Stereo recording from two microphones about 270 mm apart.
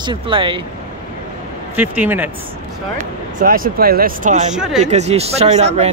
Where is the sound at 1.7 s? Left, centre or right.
Centre.